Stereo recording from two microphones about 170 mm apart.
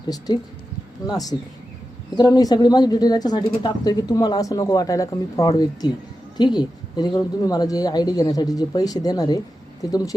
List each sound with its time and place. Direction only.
1.0 s speech: 20° left (ahead or behind)